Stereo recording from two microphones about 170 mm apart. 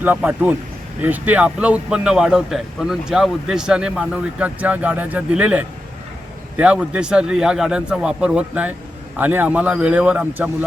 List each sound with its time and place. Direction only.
0.0 s a man's voice: 10° right (ahead or behind)